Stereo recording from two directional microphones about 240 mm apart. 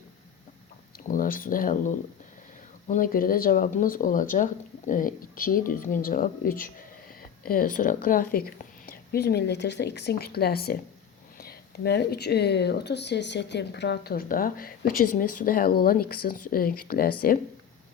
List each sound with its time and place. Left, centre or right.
1.0 s speech: left